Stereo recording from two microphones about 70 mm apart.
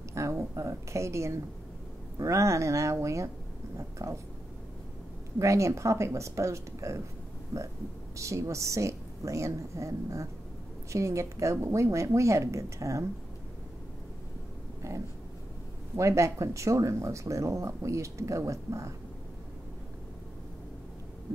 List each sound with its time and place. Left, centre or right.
0.1 s speech: right
5.4 s speech: right
8.2 s speech: right
16.0 s speech: right